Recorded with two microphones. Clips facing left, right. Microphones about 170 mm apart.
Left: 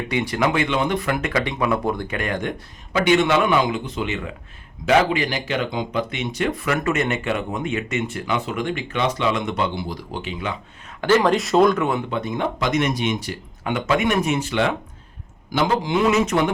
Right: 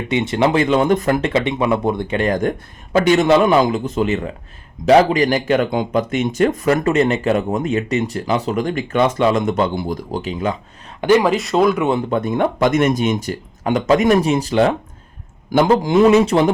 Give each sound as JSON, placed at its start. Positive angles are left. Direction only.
{"t": 0.1, "sound": "speech", "side_deg": -25}
{"t": 1.3, "sound": "speech", "side_deg": -25}
{"t": 11.0, "sound": "speech", "side_deg": -15}
{"t": 11.3, "sound": "speech", "side_deg": 0}
{"t": 12.1, "sound": "speech", "side_deg": -50}